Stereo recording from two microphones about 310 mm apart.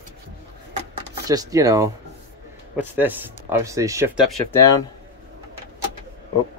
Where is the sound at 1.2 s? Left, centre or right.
Centre.